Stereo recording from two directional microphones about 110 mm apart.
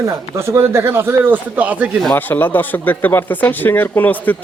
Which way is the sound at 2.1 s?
15° left (ahead or behind).